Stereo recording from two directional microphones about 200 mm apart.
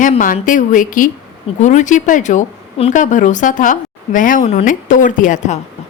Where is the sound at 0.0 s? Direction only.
40° left (ahead or behind).